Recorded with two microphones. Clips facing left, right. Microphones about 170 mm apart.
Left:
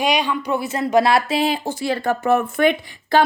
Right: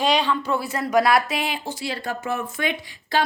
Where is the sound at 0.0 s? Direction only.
15° left (ahead or behind); by 1.7 s 35° left (ahead or behind).